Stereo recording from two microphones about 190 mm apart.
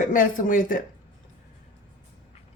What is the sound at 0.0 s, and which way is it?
Speech, 45° left (ahead or behind).